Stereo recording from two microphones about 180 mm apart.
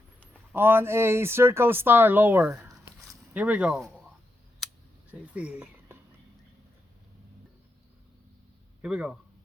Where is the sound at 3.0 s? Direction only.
5° right (ahead or behind).